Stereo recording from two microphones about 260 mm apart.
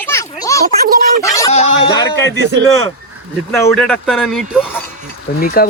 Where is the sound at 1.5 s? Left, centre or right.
Left.